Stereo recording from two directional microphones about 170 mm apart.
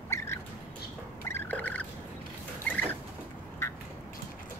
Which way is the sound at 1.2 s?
10° left (ahead or behind).